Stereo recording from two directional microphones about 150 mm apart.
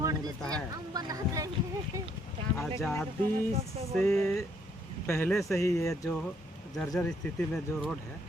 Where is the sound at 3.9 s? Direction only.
5° left (ahead or behind).